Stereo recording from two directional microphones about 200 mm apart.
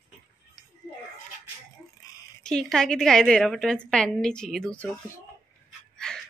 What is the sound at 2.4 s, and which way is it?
A woman's voice, 5° left (ahead or behind).